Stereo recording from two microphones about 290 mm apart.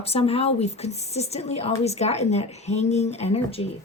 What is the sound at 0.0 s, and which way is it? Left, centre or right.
A woman's voice, left.